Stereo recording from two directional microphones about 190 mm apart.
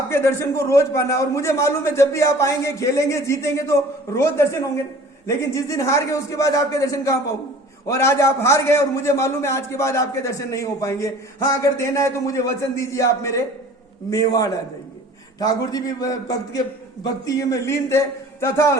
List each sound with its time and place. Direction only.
0.1 s a man's voice: 15° left (ahead or behind)